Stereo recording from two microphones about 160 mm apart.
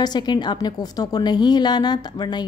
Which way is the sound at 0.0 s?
25° left (ahead or behind).